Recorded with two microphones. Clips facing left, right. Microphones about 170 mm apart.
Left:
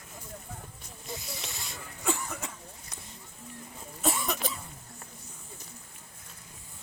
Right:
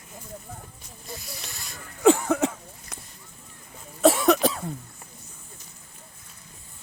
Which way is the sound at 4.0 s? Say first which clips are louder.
Right 13 dB; 85° right.